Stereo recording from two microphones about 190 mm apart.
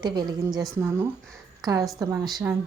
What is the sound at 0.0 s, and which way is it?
A woman's voice, 20° right (ahead or behind).